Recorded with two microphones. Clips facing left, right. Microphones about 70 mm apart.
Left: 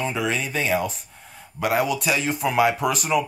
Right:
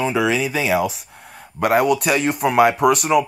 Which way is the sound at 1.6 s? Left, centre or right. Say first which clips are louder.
Right 6 dB; right.